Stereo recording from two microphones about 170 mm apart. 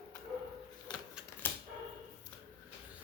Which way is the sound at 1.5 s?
10° left (ahead or behind).